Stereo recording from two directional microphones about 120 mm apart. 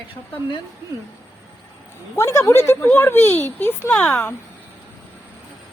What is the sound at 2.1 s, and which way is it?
A woman's voice, 25° left (ahead or behind).